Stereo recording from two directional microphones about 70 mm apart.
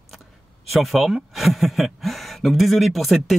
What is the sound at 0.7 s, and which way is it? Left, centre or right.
Speech, centre.